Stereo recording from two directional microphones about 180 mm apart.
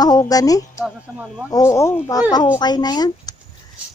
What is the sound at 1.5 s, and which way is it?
A woman's voice, 15° left (ahead or behind).